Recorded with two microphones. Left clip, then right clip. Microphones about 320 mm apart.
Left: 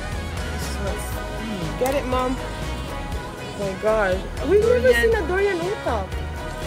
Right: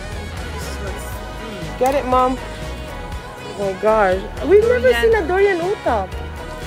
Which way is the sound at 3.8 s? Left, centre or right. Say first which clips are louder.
Right 5 dB; right.